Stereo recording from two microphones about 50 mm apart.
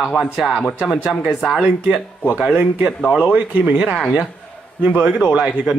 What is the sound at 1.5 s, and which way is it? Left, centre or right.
Speech, centre.